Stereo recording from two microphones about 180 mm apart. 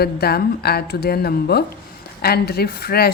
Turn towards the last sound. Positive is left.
turn(degrees=60)  # may be behind; listen again after turning